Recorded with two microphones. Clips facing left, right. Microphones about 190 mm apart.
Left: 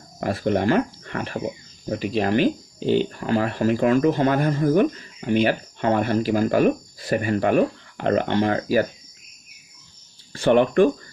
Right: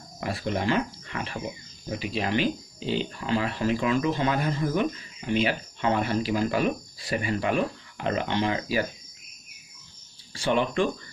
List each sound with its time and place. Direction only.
0.2 s speech: 50° left (ahead or behind)
10.3 s speech: 55° left (ahead or behind)